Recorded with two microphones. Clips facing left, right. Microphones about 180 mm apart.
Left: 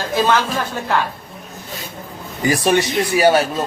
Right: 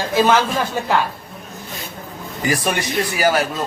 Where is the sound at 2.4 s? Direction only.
25° left (ahead or behind).